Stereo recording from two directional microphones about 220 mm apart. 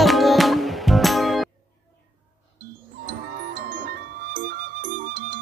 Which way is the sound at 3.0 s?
40° right (ahead or behind).